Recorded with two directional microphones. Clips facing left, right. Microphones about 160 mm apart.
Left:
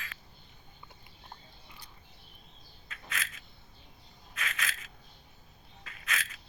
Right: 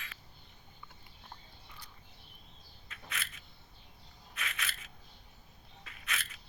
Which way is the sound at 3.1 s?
90° left.